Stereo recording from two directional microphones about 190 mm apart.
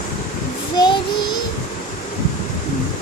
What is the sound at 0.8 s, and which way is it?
Child singing, 25° left (ahead or behind).